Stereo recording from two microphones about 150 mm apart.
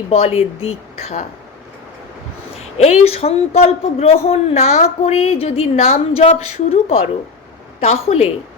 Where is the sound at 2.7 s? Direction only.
45° left (ahead or behind).